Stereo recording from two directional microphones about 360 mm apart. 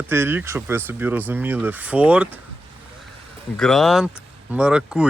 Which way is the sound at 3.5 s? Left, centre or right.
Centre.